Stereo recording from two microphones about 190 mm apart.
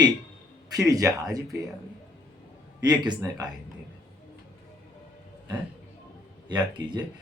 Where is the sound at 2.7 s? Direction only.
20° right (ahead or behind).